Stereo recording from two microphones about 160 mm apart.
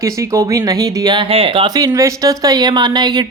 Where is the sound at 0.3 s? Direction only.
20° right (ahead or behind).